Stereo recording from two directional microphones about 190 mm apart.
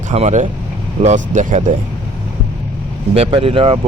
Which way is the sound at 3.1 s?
30° right (ahead or behind).